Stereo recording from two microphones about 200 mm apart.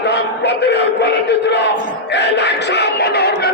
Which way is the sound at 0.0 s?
60° left (ahead or behind).